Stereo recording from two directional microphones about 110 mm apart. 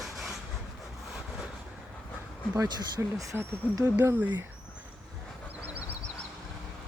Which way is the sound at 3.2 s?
30° right (ahead or behind).